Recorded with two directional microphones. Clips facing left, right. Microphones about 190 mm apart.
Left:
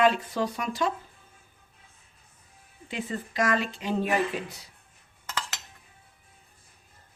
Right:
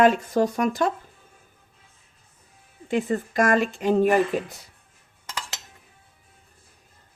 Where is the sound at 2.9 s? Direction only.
50° right (ahead or behind).